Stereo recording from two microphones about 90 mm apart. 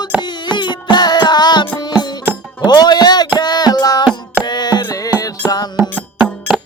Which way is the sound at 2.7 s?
50° left (ahead or behind).